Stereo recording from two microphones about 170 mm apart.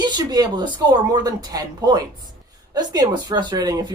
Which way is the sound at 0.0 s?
25° right (ahead or behind).